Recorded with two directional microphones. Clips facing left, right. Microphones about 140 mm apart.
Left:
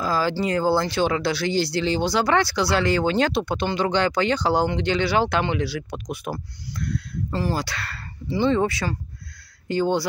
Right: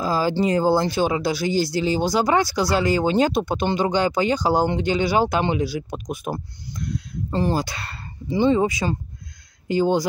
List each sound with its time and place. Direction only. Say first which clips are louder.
0.0 s speech: right 2 dB; 15° right (ahead or behind)